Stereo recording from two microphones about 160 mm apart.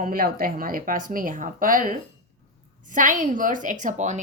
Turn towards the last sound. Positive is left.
turn(degrees=-50)  # may be behind; listen again after turning